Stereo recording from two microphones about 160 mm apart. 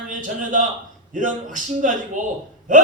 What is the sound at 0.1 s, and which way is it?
A man's voice, 55° right (ahead or behind).